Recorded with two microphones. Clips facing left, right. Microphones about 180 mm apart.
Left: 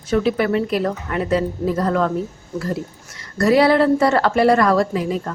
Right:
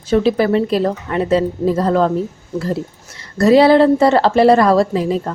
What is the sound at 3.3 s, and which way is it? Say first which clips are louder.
A woman's voice: right 5 dB; 25° right (ahead or behind).